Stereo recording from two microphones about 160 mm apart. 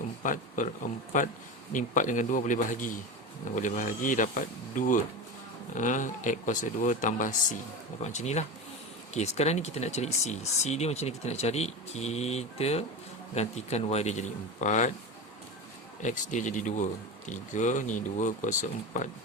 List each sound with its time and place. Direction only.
0.2 s speech: 55° left (ahead or behind)
16.0 s speech: 50° left (ahead or behind)